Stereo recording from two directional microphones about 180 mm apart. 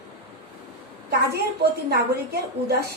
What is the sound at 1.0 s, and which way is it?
A woman's voice, 60° right (ahead or behind).